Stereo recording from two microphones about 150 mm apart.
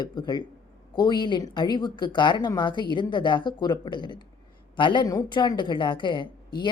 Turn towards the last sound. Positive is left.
turn(degrees=30)  # may be behind; listen again after turning